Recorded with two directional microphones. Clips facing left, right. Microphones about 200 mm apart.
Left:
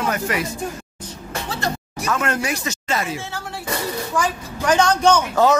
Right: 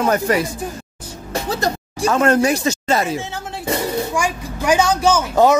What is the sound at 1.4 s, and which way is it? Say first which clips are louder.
Speech: right 4 dB; 40° right (ahead or behind).